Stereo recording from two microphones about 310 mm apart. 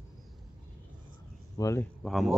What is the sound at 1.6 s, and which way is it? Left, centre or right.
Speech, centre.